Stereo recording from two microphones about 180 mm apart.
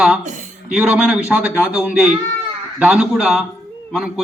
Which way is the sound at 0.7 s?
5° right (ahead or behind).